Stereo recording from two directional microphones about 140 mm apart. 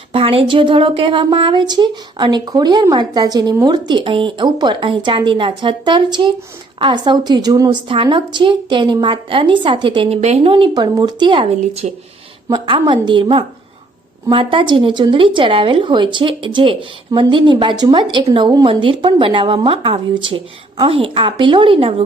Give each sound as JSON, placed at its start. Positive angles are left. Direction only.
{"t": 0.1, "sound": "a woman's voice", "side_deg": -40}
{"t": 7.9, "sound": "a woman's voice", "side_deg": -35}
{"t": 11.6, "sound": "speech", "side_deg": -50}
{"t": 12.5, "sound": "a woman's voice", "side_deg": -35}